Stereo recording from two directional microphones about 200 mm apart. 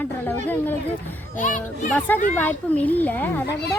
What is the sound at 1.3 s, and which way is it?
Speech, 40° left (ahead or behind).